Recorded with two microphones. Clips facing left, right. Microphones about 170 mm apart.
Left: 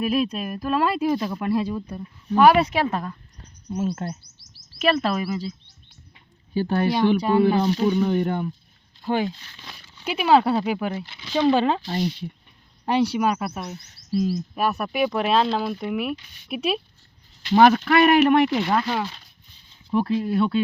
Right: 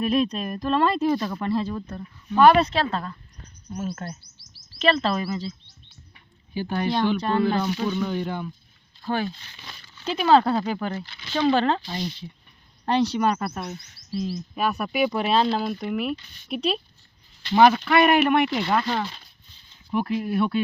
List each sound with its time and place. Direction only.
0.0 s speech: 5° left (ahead or behind)
3.8 s speech: 30° left (ahead or behind)
4.8 s speech: 10° left (ahead or behind)
6.9 s speech: 10° left (ahead or behind)
7.9 s speech: 30° left (ahead or behind)
9.0 s speech: 15° left (ahead or behind)
11.9 s speech: 50° left (ahead or behind)
12.8 s speech: 10° left (ahead or behind)
14.1 s speech: 45° left (ahead or behind)
14.5 s speech: centre (ahead or behind)
17.7 s speech: 40° left (ahead or behind)
18.4 s speech: 5° left (ahead or behind)
20.0 s speech: 25° left (ahead or behind)